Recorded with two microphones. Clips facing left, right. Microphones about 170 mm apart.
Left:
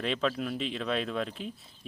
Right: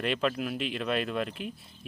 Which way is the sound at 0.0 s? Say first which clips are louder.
Right 1 dB; 5° right (ahead or behind).